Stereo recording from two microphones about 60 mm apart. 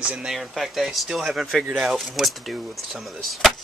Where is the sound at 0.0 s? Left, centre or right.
Centre.